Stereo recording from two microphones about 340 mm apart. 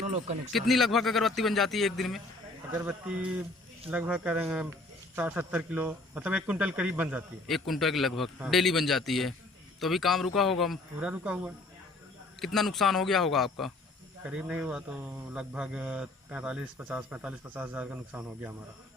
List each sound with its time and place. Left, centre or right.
0.0 s speech: centre
0.5 s speech: centre